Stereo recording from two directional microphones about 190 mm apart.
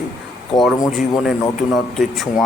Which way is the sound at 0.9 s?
Centre (ahead or behind).